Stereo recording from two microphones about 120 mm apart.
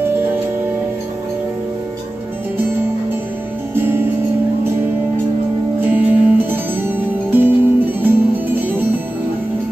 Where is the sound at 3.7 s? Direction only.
20° right (ahead or behind).